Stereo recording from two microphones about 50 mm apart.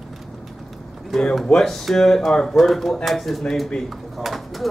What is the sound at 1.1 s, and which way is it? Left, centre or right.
Speech, centre.